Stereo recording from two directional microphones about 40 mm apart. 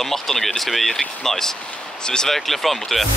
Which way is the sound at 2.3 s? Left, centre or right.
Centre.